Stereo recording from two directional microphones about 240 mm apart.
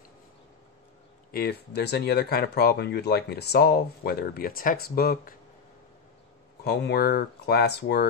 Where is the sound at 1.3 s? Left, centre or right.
Left.